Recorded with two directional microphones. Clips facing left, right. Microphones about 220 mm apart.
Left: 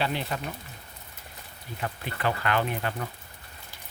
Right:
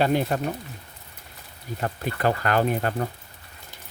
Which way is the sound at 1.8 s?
45° right (ahead or behind).